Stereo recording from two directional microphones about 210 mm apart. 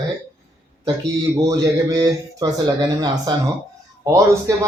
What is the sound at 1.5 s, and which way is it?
Speech, 15° right (ahead or behind).